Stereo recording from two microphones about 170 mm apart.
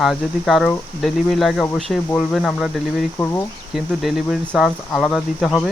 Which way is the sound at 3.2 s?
15° left (ahead or behind).